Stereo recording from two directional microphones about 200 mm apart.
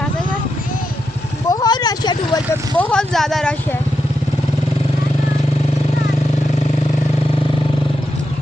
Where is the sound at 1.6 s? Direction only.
20° left (ahead or behind).